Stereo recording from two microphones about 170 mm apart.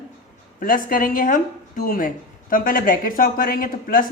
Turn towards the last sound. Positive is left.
turn(degrees=55)  # may be behind; listen again after turning